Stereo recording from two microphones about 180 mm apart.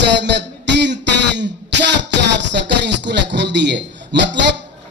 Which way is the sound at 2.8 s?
75° right (ahead or behind).